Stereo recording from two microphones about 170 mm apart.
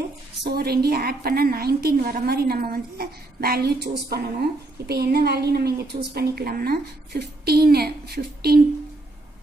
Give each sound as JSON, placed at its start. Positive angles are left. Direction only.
{"t": 0.4, "sound": "a woman's voice", "side_deg": -65}